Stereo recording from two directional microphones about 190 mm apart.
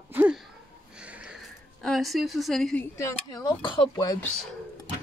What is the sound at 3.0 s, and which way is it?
Speech, 20° left (ahead or behind).